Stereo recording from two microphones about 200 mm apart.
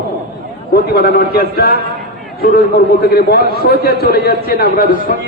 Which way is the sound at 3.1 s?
50° left (ahead or behind).